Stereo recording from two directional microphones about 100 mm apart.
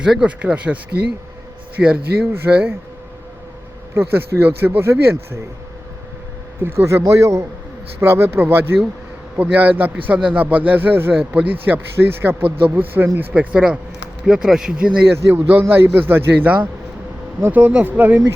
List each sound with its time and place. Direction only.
0.0 s speech: 10° right (ahead or behind)
1.8 s speech: 5° right (ahead or behind)
2.3 s speech: 20° right (ahead or behind)
3.9 s speech: 20° right (ahead or behind)
6.6 s speech: 25° right (ahead or behind); by 14.9 s 10° right (ahead or behind)
15.3 s speech: 20° right (ahead or behind)